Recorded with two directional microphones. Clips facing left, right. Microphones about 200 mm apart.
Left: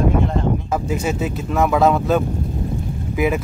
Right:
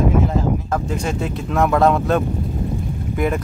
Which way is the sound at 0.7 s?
5° left (ahead or behind).